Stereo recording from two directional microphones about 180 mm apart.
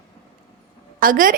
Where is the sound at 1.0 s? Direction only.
50° right (ahead or behind).